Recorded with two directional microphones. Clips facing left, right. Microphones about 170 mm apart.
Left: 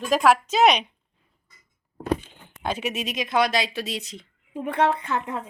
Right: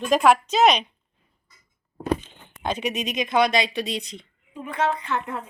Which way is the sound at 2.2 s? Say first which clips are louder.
Right 1 dB; 5° left (ahead or behind).